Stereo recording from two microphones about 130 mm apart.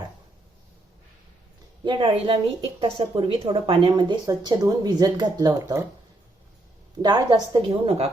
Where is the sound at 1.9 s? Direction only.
40° right (ahead or behind).